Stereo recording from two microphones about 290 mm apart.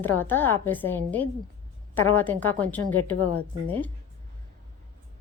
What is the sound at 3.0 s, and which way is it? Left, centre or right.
Speech, left.